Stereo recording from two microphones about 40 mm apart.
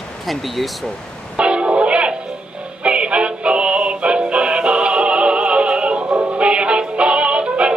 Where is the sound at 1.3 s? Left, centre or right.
Right.